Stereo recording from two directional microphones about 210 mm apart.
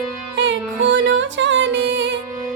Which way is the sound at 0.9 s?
60° right (ahead or behind).